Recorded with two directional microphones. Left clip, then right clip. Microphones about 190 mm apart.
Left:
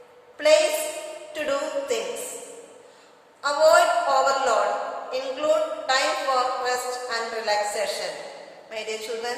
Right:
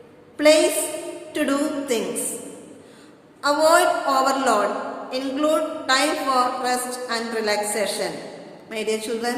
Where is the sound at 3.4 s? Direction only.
45° right (ahead or behind).